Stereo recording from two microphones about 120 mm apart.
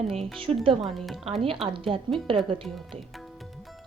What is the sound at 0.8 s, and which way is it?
Speech, centre (ahead or behind).